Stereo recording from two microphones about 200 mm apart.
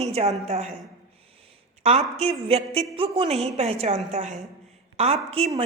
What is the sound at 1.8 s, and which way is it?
A woman's voice, 30° right (ahead or behind).